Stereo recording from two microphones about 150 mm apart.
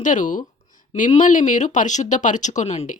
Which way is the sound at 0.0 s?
60° left (ahead or behind).